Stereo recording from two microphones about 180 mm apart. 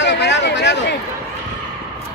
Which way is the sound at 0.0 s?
75° left (ahead or behind).